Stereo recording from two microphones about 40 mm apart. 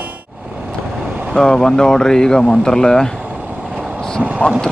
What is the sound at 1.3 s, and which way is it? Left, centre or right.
Speech, centre.